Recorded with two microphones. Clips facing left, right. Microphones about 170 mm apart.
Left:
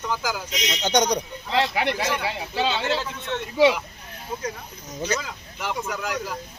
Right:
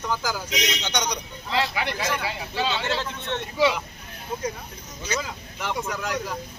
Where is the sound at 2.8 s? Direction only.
5° left (ahead or behind).